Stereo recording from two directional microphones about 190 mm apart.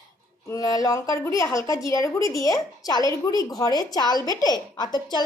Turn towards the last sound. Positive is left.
turn(degrees=20)  # may be behind; listen again after turning